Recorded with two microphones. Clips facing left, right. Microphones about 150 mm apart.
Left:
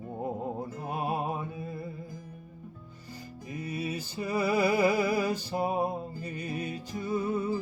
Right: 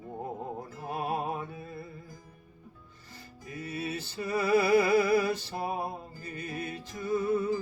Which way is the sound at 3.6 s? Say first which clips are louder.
Left 1 dB; 15° left (ahead or behind).